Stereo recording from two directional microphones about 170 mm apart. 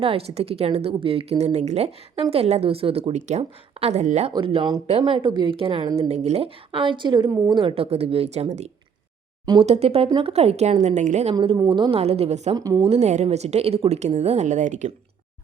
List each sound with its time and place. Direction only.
0.0 s a woman's voice: 35° right (ahead or behind)
4.3 s a woman's voice: 30° right (ahead or behind)
11.5 s a woman's voice: 25° right (ahead or behind)
12.5 s speech: 20° right (ahead or behind)
12.9 s a woman's voice: 40° right (ahead or behind)